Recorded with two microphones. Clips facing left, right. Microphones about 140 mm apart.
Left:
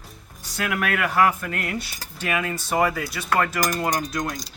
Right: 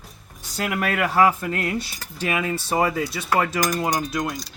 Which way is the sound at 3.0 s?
25° right (ahead or behind).